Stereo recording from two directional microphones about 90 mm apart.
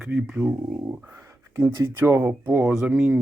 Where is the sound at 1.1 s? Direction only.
30° right (ahead or behind).